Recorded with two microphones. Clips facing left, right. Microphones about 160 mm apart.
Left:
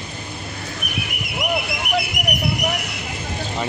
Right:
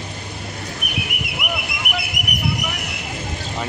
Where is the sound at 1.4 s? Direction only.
40° left (ahead or behind).